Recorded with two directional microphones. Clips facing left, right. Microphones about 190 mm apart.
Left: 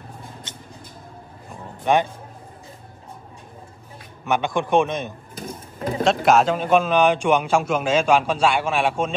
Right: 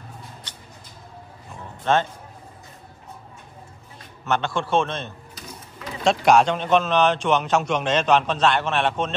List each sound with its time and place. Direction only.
0.5 s vehicle: 20° left (ahead or behind)
1.9 s a man's voice: 15° left (ahead or behind)
4.0 s a man's voice: 15° left (ahead or behind)
5.3 s sewing machine: 50° left (ahead or behind)
6.2 s a man's voice: 5° left (ahead or behind)